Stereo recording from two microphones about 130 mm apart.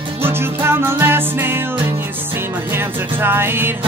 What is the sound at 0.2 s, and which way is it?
Music, 20° right (ahead or behind).